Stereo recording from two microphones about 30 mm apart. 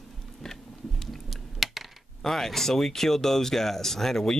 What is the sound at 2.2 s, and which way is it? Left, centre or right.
Speech, centre.